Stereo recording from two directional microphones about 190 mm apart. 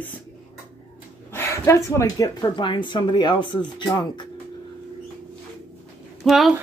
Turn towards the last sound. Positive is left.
turn(degrees=0)  # may be behind; listen again after turning